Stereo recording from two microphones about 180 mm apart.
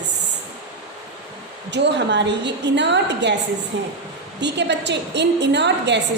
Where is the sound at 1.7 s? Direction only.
75° right (ahead or behind).